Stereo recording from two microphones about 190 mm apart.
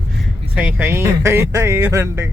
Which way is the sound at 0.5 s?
10° right (ahead or behind).